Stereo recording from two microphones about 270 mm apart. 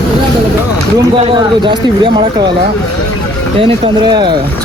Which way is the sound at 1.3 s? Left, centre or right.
Centre.